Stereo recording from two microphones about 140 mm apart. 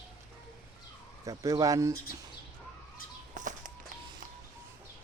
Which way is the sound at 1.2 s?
25° right (ahead or behind).